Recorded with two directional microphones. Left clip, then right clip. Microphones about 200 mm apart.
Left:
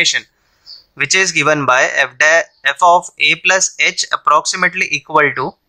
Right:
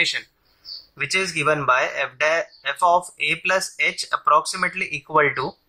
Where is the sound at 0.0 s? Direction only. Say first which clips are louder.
Left 7 dB; 35° left (ahead or behind).